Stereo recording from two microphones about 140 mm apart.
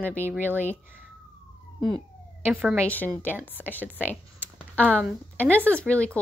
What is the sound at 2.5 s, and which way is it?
Speech, 10° right (ahead or behind).